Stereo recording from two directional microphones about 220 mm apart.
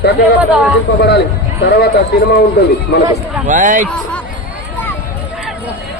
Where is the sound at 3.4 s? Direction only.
35° right (ahead or behind).